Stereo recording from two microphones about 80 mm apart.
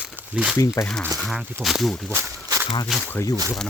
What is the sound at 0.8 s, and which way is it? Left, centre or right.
Speech, left.